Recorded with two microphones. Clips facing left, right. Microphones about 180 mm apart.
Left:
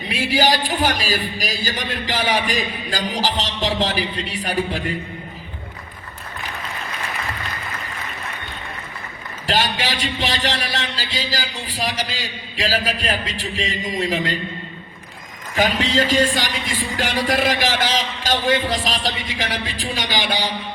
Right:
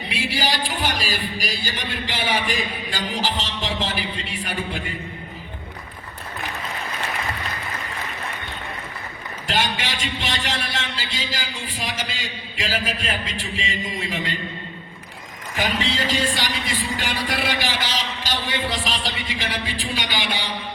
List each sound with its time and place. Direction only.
0.1 s a man's voice: 45° left (ahead or behind)
9.5 s a man's voice: 35° left (ahead or behind)
15.5 s a man's voice: 40° left (ahead or behind)